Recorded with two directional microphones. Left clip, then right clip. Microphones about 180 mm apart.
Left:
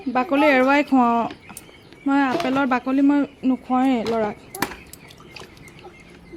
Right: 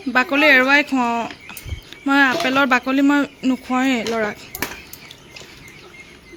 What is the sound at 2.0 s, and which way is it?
Speech, 5° left (ahead or behind).